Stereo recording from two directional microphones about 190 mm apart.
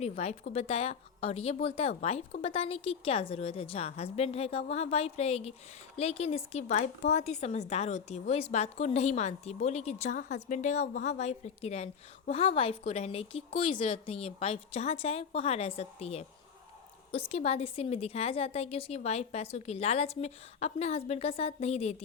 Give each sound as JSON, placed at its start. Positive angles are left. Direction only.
{"t": 0.0, "sound": "a woman's voice", "side_deg": 35}